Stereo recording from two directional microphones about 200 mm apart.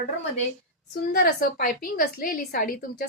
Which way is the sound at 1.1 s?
50° left (ahead or behind).